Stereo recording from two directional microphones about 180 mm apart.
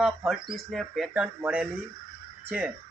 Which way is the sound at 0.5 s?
Centre (ahead or behind).